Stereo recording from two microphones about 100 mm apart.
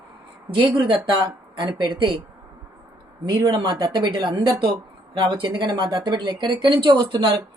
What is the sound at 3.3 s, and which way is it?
Speech, 40° right (ahead or behind).